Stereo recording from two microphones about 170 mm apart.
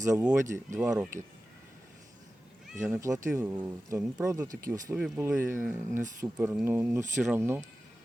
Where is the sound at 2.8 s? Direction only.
15° right (ahead or behind).